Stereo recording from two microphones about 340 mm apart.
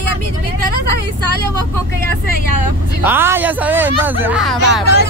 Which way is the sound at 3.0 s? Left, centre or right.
Centre.